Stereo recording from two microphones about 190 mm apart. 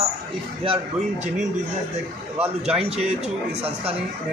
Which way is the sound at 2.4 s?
30° right (ahead or behind).